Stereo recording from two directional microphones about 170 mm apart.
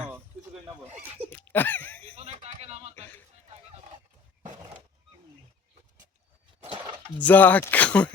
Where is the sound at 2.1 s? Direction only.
40° right (ahead or behind).